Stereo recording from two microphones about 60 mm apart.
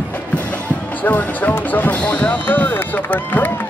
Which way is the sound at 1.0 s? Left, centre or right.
Left.